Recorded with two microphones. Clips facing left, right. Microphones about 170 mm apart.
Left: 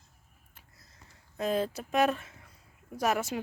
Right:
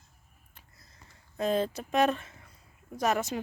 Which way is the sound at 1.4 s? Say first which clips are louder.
Right 2 dB; 5° left (ahead or behind).